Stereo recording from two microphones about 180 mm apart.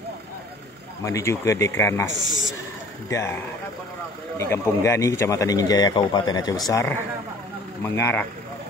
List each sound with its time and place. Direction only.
1.0 s speech: 15° left (ahead or behind)
3.1 s speech: 15° left (ahead or behind)
4.4 s speech: 15° left (ahead or behind)